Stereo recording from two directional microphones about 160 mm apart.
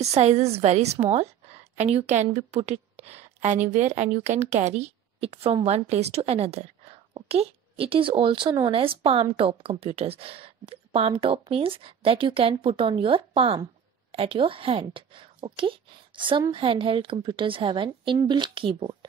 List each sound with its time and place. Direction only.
0.0 s a woman's voice: 40° right (ahead or behind)